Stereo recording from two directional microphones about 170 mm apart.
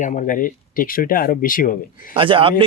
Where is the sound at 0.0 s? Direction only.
50° left (ahead or behind).